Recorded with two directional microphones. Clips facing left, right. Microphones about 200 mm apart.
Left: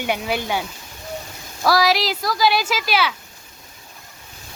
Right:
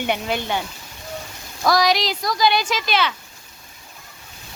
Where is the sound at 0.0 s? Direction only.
10° left (ahead or behind).